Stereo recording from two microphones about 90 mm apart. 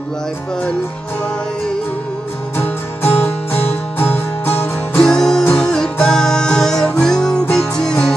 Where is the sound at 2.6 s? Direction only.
25° left (ahead or behind).